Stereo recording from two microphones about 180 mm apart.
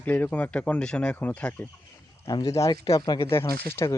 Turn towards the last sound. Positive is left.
turn(degrees=15)  # may be behind; listen again after turning